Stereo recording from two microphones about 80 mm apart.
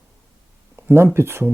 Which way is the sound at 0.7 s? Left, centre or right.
Right.